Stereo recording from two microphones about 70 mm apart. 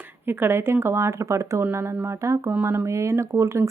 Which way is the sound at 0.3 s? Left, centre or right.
Right.